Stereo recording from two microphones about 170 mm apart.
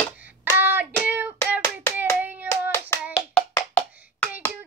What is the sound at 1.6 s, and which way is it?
Hands, 15° left (ahead or behind).